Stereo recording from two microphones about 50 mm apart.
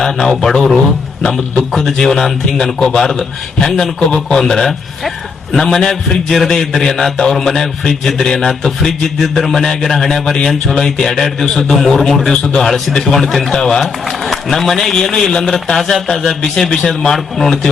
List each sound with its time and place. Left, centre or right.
0.0 s a man's voice: centre
12.3 s a man's voice: left
12.5 s a man's voice: centre